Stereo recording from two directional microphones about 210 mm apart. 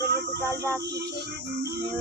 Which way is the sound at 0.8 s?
50° right (ahead or behind).